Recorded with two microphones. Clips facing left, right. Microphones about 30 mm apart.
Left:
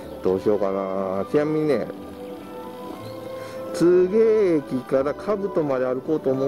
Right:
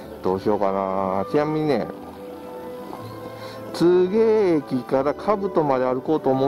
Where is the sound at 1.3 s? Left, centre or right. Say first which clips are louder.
Left 2 dB; right.